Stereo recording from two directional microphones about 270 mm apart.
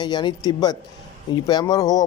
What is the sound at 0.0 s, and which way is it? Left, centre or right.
Speech, centre.